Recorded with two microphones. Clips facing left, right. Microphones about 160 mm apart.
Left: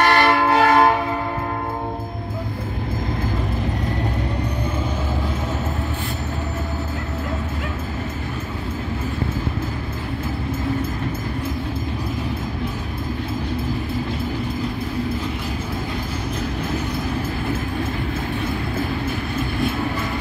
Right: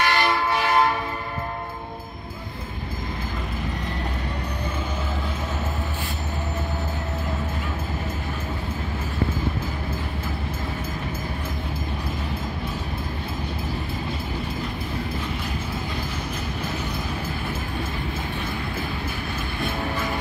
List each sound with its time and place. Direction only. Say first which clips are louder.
0.0 s train: left 6 dB; 65° left (ahead or behind)